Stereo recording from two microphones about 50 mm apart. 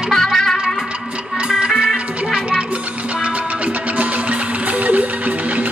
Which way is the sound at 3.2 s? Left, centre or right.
Right.